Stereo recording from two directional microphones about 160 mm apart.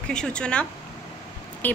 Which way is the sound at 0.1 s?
5° left (ahead or behind).